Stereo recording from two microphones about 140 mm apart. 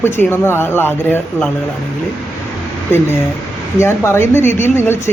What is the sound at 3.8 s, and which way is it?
Speech, 20° left (ahead or behind).